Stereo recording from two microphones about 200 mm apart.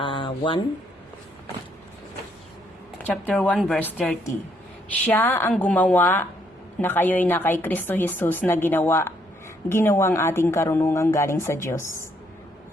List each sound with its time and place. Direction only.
0.0 s speech: 25° left (ahead or behind)
3.0 s a woman's voice: 5° left (ahead or behind)